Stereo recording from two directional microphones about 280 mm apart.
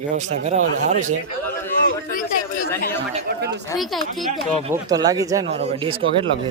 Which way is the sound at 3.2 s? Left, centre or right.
Right.